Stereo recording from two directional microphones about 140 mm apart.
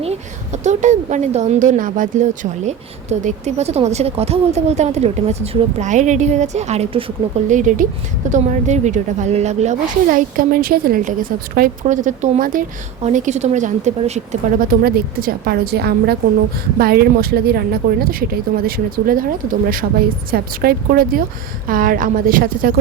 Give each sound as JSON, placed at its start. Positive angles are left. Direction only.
{"t": 0.0, "sound": "a woman's voice", "side_deg": -50}
{"t": 7.5, "sound": "a woman's voice", "side_deg": -65}
{"t": 14.6, "sound": "a woman's voice", "side_deg": -90}